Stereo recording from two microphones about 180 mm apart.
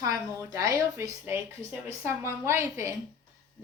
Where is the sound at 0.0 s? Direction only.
20° right (ahead or behind).